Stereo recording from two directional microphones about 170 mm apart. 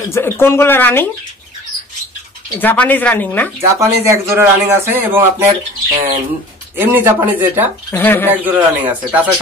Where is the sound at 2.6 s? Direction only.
10° left (ahead or behind).